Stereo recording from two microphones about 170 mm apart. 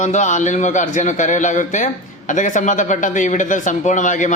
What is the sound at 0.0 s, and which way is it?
A man's voice, 45° left (ahead or behind).